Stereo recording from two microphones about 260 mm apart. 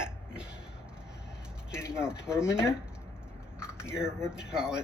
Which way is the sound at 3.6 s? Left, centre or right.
Centre.